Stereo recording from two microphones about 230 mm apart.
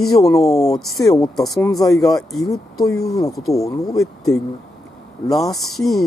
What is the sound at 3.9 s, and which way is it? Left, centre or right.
Speech, centre.